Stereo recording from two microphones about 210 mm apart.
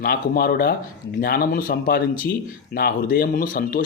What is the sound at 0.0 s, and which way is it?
Speech, 45° left (ahead or behind).